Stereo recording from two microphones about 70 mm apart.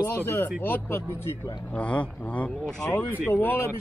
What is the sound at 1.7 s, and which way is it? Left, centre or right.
Speech, centre.